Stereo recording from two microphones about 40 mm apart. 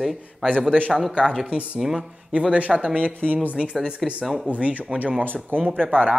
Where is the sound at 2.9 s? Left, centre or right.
Right.